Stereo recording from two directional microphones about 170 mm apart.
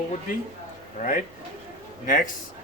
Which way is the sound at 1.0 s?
50° left (ahead or behind).